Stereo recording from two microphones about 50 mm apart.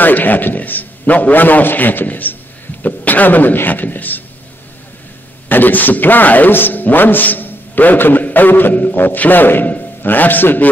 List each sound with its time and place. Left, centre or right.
0.0 s a man's voice: left
5.5 s speech: left